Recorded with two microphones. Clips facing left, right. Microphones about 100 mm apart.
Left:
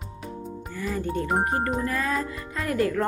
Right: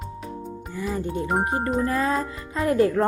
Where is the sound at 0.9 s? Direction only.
20° right (ahead or behind).